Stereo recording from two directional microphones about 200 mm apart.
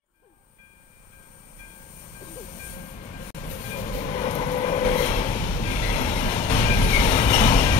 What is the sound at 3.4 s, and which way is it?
Train, 35° left (ahead or behind).